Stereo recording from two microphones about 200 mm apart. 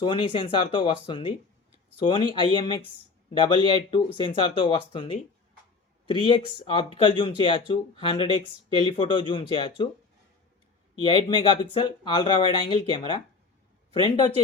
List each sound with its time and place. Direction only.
0.0 s speech: 25° left (ahead or behind)
11.0 s speech: 25° left (ahead or behind)